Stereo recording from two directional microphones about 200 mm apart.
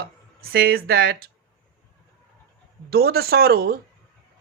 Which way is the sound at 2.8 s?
50° right (ahead or behind).